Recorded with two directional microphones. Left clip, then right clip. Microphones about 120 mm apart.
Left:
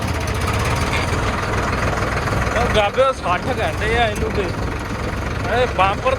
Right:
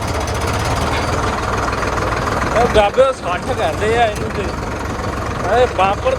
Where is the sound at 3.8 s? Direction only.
25° right (ahead or behind).